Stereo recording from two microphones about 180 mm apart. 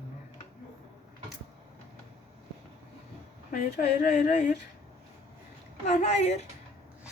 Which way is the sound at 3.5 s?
50° left (ahead or behind).